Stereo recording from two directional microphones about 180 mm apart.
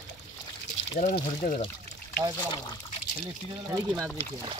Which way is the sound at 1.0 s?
45° left (ahead or behind).